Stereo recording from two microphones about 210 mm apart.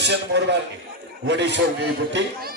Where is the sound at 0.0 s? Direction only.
55° right (ahead or behind).